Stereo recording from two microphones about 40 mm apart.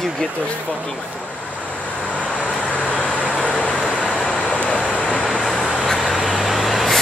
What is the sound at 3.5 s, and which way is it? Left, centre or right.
Vehicle, left.